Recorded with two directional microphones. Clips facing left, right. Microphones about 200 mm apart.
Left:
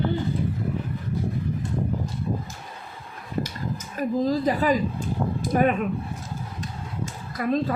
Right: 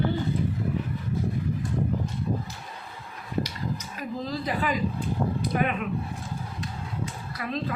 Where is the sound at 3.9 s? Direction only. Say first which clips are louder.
Left 13 dB; 45° left (ahead or behind).